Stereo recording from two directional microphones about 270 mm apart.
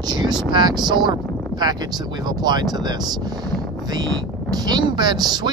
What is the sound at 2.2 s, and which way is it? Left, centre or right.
Speech, centre.